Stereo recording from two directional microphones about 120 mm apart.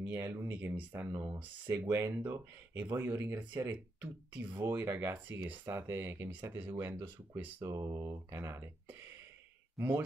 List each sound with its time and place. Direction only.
0.0 s speech: 20° right (ahead or behind)
7.6 s speech: 30° right (ahead or behind)